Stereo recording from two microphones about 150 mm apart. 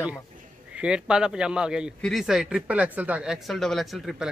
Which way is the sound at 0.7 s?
5° right (ahead or behind).